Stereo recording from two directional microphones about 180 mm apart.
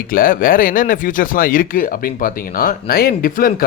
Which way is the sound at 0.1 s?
50° left (ahead or behind).